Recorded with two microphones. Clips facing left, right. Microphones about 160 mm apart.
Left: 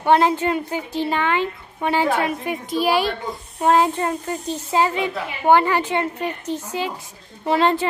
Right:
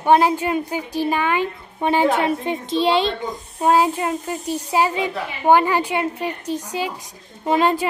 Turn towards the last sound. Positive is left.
turn(degrees=-15)  # may be behind; listen again after turning